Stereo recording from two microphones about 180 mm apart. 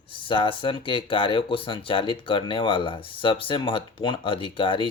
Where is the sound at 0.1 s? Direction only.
30° left (ahead or behind).